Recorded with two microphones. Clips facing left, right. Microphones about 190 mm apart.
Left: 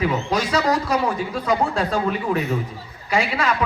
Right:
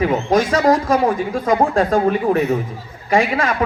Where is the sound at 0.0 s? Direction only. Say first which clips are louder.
Right 6 dB; 50° right (ahead or behind).